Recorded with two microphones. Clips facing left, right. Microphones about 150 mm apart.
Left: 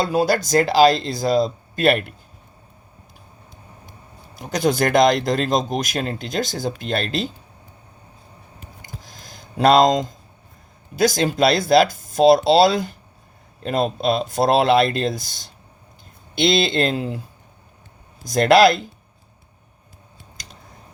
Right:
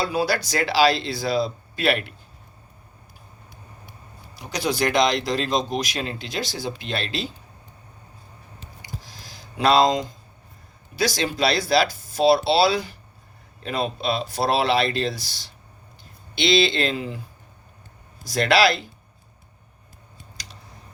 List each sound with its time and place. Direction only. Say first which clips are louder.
0.0 s speech: left 4 dB; 50° left (ahead or behind)
4.4 s speech: left 5 dB; 50° left (ahead or behind)
8.8 s a sound: right 2 dB; 50° left (ahead or behind)
10.9 s speech: left 6 dB; 50° left (ahead or behind)
18.3 s speech: left 6 dB; 45° left (ahead or behind)
20.3 s a sound: left 1 dB; 50° left (ahead or behind)